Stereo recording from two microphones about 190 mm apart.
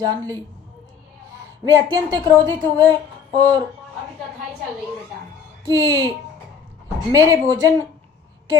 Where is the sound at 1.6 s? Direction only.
20° right (ahead or behind).